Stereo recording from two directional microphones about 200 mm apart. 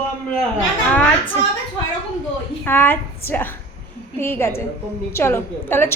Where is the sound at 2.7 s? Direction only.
10° left (ahead or behind).